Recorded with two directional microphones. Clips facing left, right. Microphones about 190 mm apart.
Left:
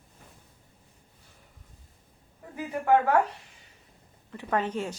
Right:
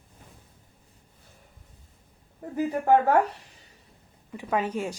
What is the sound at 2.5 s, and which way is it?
Speech, 40° right (ahead or behind).